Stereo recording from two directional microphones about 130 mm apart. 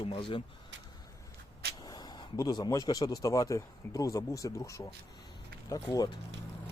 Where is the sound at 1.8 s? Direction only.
30° left (ahead or behind).